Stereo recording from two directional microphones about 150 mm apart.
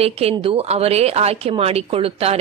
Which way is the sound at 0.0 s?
40° right (ahead or behind).